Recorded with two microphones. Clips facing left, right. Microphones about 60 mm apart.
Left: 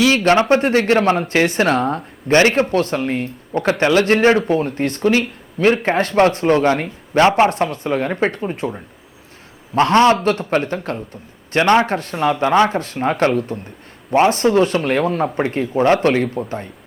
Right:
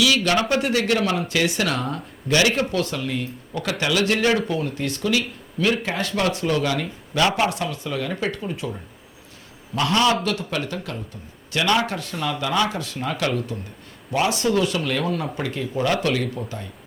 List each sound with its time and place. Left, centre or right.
0.0 s speech: left